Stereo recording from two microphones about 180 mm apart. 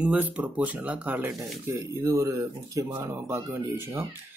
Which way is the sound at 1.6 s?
15° right (ahead or behind).